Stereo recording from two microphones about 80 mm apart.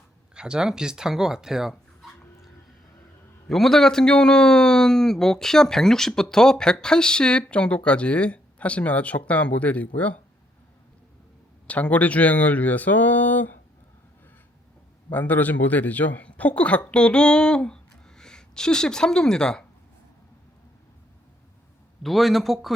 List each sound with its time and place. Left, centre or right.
0.3 s speech: centre
3.5 s a man's voice: centre
11.7 s speech: centre
15.1 s a man's voice: left
22.0 s speech: centre